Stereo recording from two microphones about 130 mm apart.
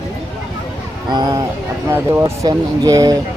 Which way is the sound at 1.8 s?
20° right (ahead or behind).